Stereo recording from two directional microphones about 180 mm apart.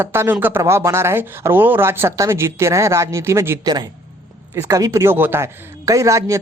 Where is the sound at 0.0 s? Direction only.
10° right (ahead or behind).